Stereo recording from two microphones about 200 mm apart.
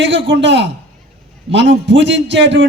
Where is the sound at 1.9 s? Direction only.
65° right (ahead or behind).